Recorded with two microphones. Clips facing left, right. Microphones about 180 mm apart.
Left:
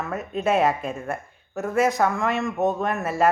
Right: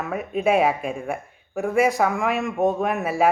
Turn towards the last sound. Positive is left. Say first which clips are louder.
# right 1 dB
turn(degrees=-10)  # may be behind; listen again after turning